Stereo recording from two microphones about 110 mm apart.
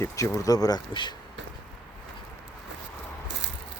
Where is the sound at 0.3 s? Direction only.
30° left (ahead or behind).